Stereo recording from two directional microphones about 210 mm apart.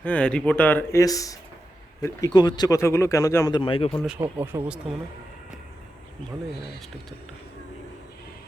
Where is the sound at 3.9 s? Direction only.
5° right (ahead or behind).